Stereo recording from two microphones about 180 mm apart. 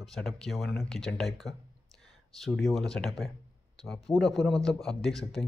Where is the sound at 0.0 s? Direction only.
Centre (ahead or behind).